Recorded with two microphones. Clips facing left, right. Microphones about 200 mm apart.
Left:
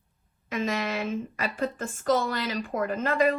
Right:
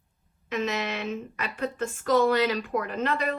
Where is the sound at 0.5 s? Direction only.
45° left (ahead or behind).